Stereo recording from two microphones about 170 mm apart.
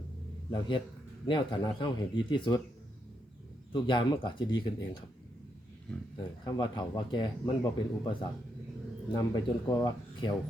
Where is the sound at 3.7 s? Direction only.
30° left (ahead or behind).